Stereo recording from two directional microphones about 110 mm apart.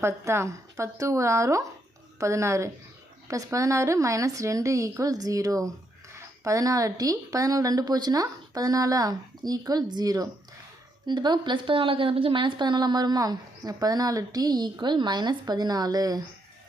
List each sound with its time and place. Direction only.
0.0 s a woman's voice: 25° right (ahead or behind)